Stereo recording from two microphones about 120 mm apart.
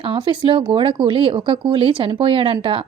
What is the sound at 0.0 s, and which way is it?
A woman's voice, 45° right (ahead or behind).